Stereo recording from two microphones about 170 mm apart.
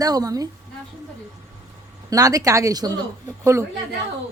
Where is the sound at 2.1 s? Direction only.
20° right (ahead or behind).